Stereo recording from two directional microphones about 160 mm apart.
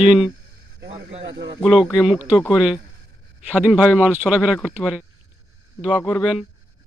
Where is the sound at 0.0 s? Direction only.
5° right (ahead or behind).